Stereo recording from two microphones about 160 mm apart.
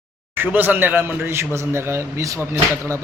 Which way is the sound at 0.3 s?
10° right (ahead or behind).